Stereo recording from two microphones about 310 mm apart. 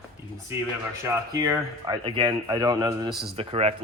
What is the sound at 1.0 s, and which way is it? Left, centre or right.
Speech, centre.